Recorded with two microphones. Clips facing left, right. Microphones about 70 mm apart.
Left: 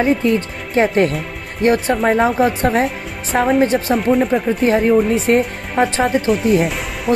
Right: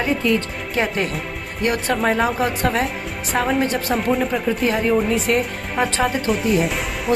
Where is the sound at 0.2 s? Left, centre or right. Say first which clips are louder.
Left 3 dB; left.